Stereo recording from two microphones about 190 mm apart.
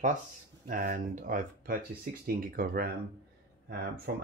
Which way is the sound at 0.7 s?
45° right (ahead or behind).